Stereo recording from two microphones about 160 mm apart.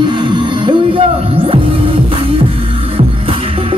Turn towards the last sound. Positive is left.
turn(degrees=-35)  # may be behind; listen again after turning